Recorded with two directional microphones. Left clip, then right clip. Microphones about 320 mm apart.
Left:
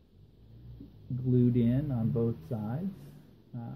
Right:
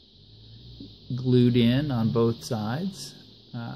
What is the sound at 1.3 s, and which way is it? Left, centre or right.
Speech, right.